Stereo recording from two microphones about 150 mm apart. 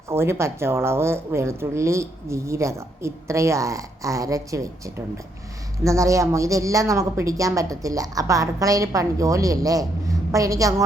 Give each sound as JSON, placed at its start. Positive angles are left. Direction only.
{"t": 0.1, "sound": "a woman's voice", "side_deg": -15}